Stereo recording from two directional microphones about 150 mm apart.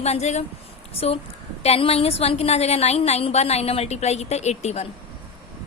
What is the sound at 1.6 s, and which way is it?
A woman's voice, 40° left (ahead or behind).